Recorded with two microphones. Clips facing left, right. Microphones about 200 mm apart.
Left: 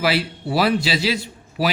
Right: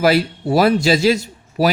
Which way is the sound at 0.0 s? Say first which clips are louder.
Right 6 dB; 45° right (ahead or behind).